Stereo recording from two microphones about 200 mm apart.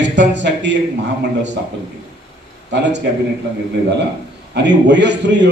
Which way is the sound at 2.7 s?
60° right (ahead or behind).